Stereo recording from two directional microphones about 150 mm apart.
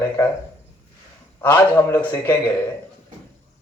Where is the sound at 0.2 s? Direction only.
20° left (ahead or behind).